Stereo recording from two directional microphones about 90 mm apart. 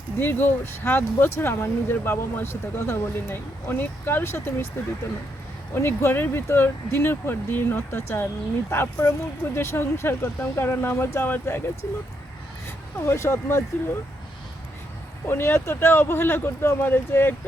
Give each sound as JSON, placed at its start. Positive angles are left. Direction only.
{"t": 0.2, "sound": "speech", "side_deg": 25}
{"t": 12.6, "sound": "speech", "side_deg": 30}
{"t": 15.3, "sound": "speech", "side_deg": 25}